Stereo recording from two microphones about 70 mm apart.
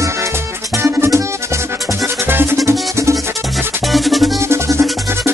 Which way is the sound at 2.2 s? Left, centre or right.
Right.